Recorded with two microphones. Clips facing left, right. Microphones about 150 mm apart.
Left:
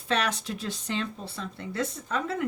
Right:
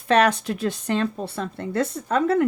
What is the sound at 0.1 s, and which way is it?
Speech, 55° right (ahead or behind).